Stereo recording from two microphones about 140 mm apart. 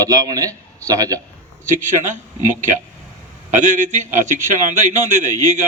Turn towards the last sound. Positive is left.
turn(degrees=-60)  # may be behind; listen again after turning